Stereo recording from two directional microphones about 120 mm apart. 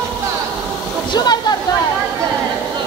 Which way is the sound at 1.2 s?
35° left (ahead or behind).